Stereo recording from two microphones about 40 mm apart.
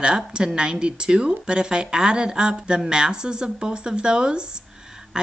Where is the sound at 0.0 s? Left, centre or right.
Right.